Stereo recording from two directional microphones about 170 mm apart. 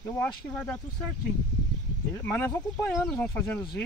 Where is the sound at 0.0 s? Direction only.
15° left (ahead or behind).